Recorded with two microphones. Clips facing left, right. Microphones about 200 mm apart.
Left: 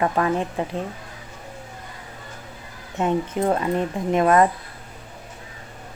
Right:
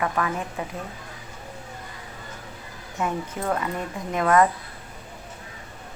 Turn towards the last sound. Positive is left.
turn(degrees=25)  # may be behind; listen again after turning